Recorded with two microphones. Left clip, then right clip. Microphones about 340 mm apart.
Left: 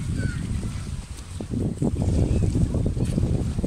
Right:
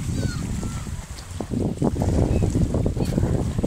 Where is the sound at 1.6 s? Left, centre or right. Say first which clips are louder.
Right 4 dB; right.